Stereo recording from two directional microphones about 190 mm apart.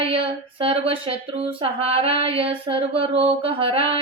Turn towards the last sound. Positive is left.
turn(degrees=-30)  # may be behind; listen again after turning